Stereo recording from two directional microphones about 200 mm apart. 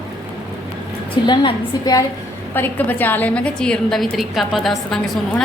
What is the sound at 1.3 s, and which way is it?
A woman's voice, 25° left (ahead or behind).